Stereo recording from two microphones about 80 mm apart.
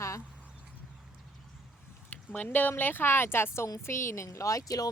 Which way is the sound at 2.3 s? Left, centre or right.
Left.